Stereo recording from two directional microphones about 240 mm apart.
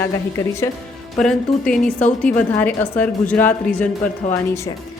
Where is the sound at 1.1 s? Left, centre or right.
Centre.